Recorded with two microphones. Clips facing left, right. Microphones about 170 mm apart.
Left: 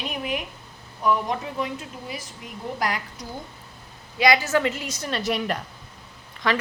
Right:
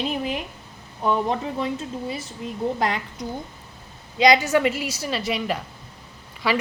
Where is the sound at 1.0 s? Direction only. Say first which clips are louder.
Right 1 dB; 30° right (ahead or behind).